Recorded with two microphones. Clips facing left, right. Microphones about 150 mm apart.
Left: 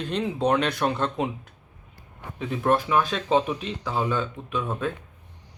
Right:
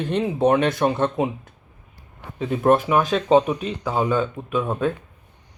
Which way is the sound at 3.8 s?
35° right (ahead or behind).